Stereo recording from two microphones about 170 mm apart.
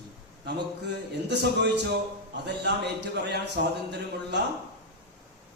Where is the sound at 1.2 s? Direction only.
85° right.